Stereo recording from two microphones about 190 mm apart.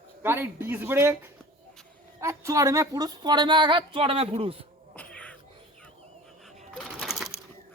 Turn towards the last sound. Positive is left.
turn(degrees=0)  # may be behind; listen again after turning